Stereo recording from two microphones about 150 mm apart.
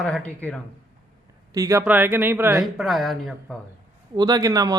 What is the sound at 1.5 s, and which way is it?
A man's voice, 20° right (ahead or behind).